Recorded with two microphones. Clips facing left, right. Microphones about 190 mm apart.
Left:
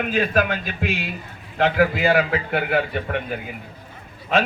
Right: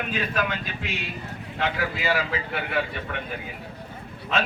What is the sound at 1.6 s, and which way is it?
A man's voice, 55° left (ahead or behind).